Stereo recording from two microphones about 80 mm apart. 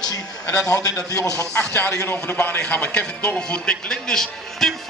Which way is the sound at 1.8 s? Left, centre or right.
Left.